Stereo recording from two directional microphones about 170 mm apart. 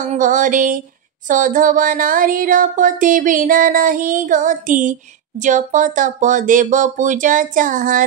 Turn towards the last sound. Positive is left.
turn(degrees=-50)  # may be behind; listen again after turning